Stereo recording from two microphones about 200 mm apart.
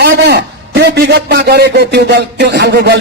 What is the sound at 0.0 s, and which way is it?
A man's voice, 55° right (ahead or behind).